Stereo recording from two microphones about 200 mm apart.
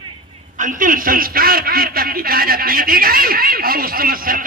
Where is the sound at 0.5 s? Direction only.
40° right (ahead or behind).